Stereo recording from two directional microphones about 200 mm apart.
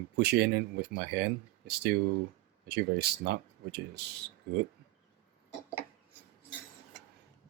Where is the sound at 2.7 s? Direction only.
55° right (ahead or behind).